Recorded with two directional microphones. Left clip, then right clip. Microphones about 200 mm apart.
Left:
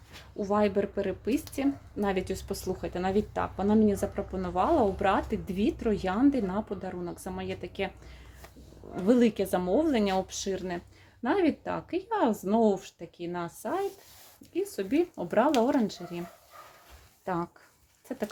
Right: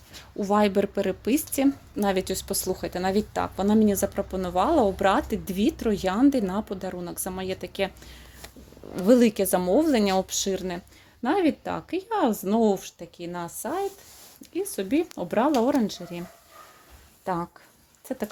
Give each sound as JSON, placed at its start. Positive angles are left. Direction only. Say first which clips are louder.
{"t": 0.3, "sound": "speech", "louder": "right 4 dB", "side_deg": -45}
{"t": 9.0, "sound": "speech", "louder": "right 5 dB", "side_deg": -35}
{"t": 17.2, "sound": "speech", "louder": "right 3 dB", "side_deg": -30}